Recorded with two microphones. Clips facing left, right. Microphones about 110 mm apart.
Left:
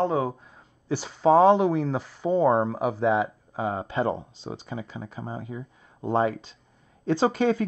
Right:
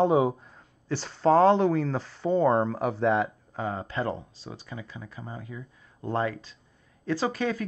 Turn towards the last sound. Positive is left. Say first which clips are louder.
# left 6 dB
turn(degrees=20)  # may be behind; listen again after turning